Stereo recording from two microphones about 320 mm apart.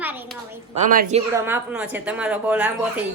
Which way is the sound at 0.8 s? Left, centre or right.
Right.